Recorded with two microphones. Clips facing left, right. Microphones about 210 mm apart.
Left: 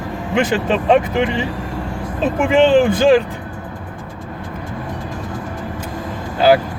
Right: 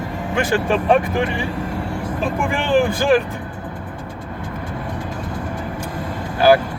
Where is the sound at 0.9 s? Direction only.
20° left (ahead or behind).